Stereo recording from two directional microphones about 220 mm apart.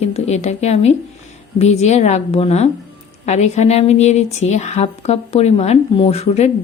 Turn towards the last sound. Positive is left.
turn(degrees=30)  # may be behind; listen again after turning